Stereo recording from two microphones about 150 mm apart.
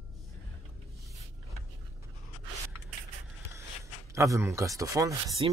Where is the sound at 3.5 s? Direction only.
20° right (ahead or behind).